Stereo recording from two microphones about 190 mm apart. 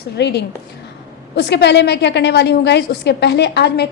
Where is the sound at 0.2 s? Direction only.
60° left (ahead or behind).